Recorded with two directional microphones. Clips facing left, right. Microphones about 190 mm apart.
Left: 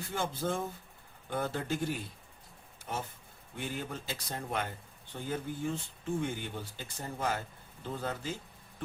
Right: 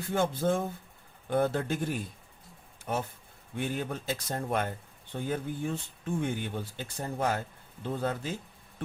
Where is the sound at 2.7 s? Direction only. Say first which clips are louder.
Right 6 dB; 50° right (ahead or behind).